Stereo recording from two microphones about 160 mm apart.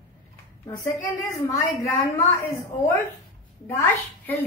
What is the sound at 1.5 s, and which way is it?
A woman's voice, 20° left (ahead or behind).